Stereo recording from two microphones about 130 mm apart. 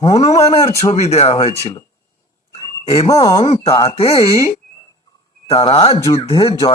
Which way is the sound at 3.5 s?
55° left (ahead or behind).